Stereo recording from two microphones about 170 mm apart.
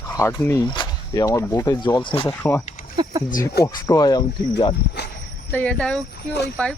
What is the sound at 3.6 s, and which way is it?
Speech, 20° left (ahead or behind).